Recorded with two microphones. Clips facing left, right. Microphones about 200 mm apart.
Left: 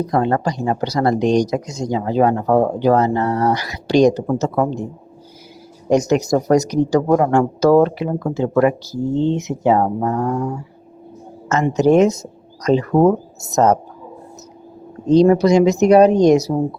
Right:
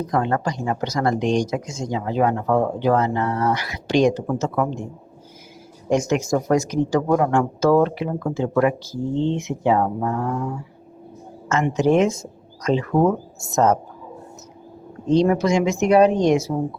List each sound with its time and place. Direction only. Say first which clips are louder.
0.0 s speech: left 4 dB; 35° left (ahead or behind)
5.9 s speech: left 4 dB; 40° left (ahead or behind)
15.0 s speech: left 6 dB; 40° left (ahead or behind)